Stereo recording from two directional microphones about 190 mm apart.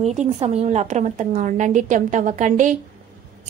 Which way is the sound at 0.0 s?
35° right (ahead or behind).